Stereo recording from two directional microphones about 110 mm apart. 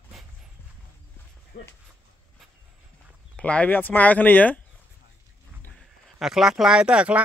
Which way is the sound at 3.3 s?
10° left (ahead or behind).